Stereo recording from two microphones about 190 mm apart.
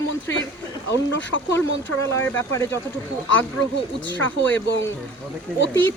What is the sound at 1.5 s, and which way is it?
Speech, 15° left (ahead or behind).